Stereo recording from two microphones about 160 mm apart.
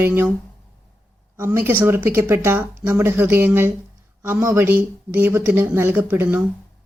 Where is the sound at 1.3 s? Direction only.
15° right (ahead or behind).